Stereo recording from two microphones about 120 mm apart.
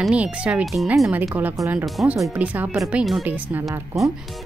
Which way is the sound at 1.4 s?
15° right (ahead or behind).